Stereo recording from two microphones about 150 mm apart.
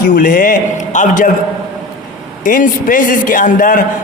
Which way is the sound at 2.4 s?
65° left (ahead or behind).